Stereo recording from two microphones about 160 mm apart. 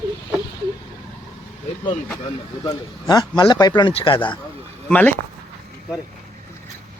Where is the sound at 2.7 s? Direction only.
25° left (ahead or behind).